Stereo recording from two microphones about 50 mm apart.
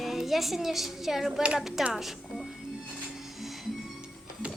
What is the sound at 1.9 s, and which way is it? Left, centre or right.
Music, centre.